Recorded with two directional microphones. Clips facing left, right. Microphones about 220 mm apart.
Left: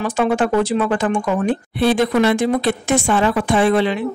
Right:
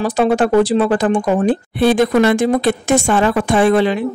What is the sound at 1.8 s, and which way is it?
Speech, 45° right (ahead or behind).